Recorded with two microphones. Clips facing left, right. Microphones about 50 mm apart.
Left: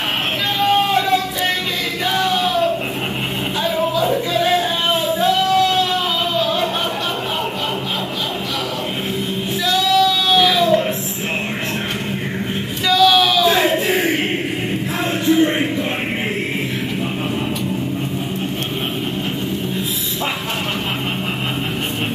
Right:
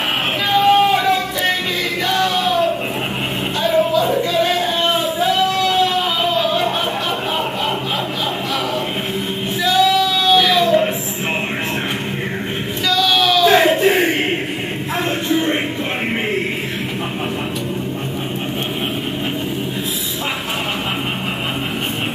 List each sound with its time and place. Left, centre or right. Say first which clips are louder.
0.7 s yodeling: right 2 dB; centre
2.1 s music: even; centre
3.6 s music: right 3 dB; centre
9.7 s child singing: right 1 dB; centre
12.8 s a sound: left 3 dB; centre
13.5 s a sound: right 3 dB; right